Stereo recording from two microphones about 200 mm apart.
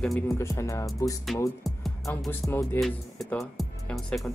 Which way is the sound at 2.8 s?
Centre (ahead or behind).